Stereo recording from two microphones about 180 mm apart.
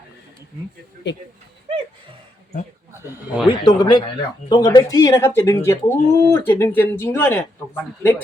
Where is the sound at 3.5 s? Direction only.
25° left (ahead or behind).